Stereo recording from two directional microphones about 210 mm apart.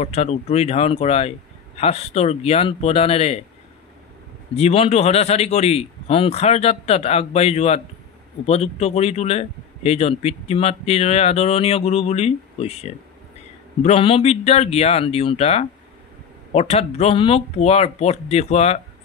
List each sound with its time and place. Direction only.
0.0 s a man's voice: 30° left (ahead or behind)
4.6 s a man's voice: 30° left (ahead or behind)